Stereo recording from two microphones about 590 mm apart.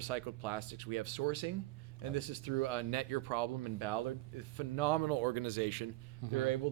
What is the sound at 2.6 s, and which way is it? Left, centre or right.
A man's voice, right.